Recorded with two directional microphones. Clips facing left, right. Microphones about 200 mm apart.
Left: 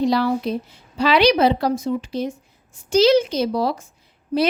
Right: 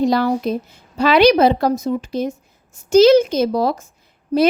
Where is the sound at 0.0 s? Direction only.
45° right (ahead or behind).